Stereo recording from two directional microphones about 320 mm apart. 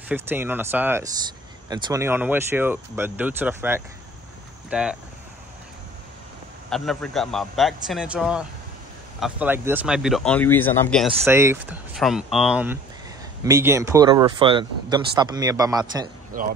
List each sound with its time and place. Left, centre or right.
0.1 s speech: centre
6.7 s speech: centre
16.3 s speech: right